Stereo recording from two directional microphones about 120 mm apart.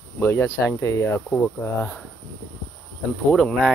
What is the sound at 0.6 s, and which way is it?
Speech, 25° left (ahead or behind).